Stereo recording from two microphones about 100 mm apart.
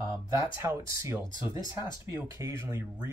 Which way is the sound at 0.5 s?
25° right (ahead or behind).